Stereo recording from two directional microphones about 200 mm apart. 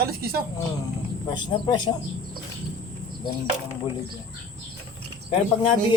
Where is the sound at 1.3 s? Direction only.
20° left (ahead or behind).